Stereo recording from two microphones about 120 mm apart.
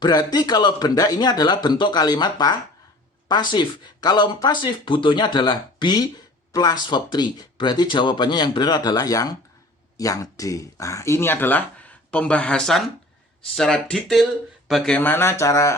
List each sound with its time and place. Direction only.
0.0 s speech: 35° left (ahead or behind); by 15.0 s 5° left (ahead or behind)
15.0 s speech: 20° left (ahead or behind)